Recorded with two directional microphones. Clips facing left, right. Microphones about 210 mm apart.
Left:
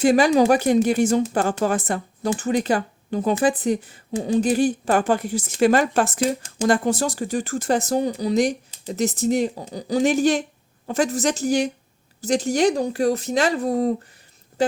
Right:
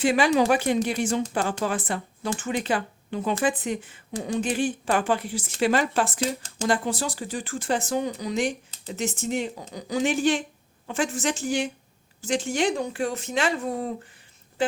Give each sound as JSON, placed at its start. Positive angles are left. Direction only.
{"t": 0.0, "sound": "speech", "side_deg": 40}
{"t": 6.1, "sound": "speech", "side_deg": 10}
{"t": 6.7, "sound": "speech", "side_deg": 45}